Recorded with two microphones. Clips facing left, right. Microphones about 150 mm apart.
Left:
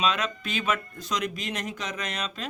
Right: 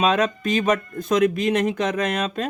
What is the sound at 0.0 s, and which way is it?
Speech, 45° right (ahead or behind).